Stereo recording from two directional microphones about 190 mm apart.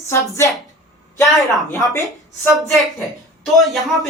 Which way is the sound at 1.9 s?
15° left (ahead or behind).